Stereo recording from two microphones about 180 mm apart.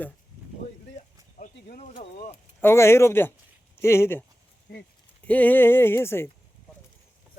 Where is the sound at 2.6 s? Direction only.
15° left (ahead or behind).